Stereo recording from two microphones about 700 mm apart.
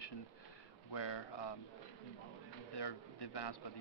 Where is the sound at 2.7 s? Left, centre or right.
Left.